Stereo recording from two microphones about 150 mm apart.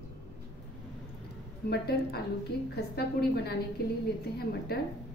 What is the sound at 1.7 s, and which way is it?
A woman's voice, 90° left.